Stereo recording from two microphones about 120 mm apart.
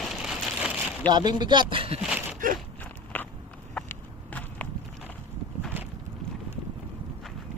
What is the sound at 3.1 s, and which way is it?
Walk, 15° left (ahead or behind).